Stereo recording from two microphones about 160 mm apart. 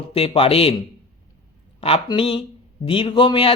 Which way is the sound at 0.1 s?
35° left (ahead or behind).